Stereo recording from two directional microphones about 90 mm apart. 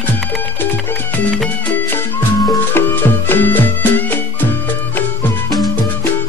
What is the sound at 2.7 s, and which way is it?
Music, 20° left (ahead or behind).